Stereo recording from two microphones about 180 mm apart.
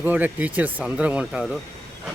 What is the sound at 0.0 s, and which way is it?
Speech, 10° right (ahead or behind).